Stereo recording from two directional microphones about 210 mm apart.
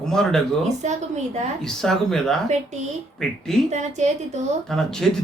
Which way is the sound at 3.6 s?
35° right (ahead or behind).